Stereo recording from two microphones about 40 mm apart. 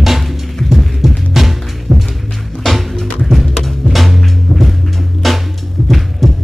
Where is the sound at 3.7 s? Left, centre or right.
Centre.